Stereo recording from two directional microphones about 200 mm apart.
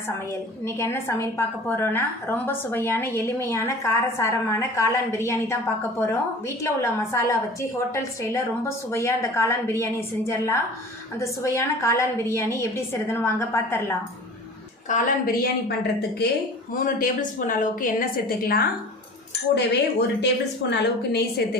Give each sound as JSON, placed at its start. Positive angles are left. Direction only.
{"t": 0.6, "sound": "a woman's voice", "side_deg": 15}
{"t": 14.8, "sound": "a woman's voice", "side_deg": 40}
{"t": 16.7, "sound": "a woman's voice", "side_deg": 45}
{"t": 19.5, "sound": "a woman's voice", "side_deg": 60}